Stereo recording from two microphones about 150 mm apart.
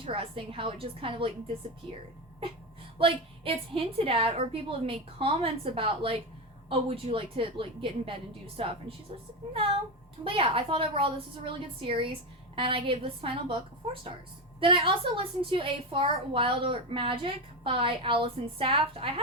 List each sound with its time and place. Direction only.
0.0 s a woman's voice: 35° right (ahead or behind)
3.0 s a woman's voice: 40° right (ahead or behind)
10.2 s a woman's voice: 35° right (ahead or behind)
14.6 s a woman's voice: 35° right (ahead or behind)